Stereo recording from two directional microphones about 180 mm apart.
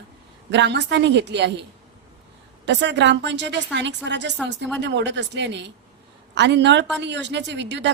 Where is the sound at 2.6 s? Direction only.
75° right (ahead or behind).